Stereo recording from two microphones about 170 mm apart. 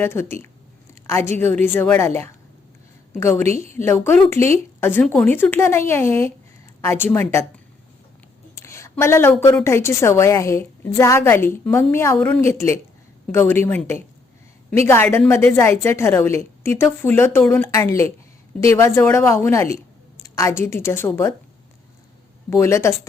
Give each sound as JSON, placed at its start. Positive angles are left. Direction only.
{"t": 0.0, "sound": "a woman's voice", "side_deg": 15}
{"t": 8.5, "sound": "a sound", "side_deg": 15}
{"t": 9.6, "sound": "a woman's voice", "side_deg": 15}
{"t": 22.4, "sound": "a woman's voice", "side_deg": 15}